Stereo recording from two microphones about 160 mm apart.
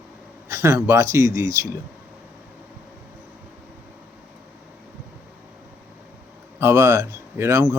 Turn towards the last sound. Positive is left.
turn(degrees=-15)  # may be behind; listen again after turning